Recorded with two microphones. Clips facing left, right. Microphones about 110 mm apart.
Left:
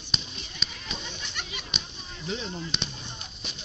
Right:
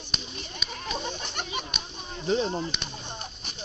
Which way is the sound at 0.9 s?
40° right (ahead or behind).